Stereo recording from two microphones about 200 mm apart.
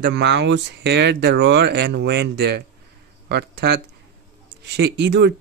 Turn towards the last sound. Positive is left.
turn(degrees=-55)  # may be behind; listen again after turning